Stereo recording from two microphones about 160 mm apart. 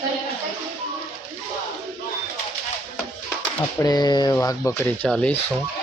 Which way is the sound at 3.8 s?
25° left (ahead or behind).